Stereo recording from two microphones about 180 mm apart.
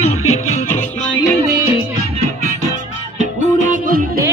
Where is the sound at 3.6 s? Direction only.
50° right (ahead or behind).